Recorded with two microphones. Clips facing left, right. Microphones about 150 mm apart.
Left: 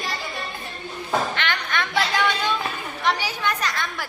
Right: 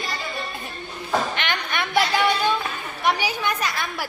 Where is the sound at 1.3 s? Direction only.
15° right (ahead or behind).